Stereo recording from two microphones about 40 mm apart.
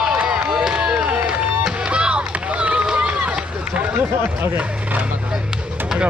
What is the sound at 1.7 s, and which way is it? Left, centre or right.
Run, right.